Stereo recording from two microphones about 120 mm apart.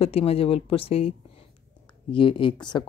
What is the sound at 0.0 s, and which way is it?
A woman's voice, 55° left (ahead or behind).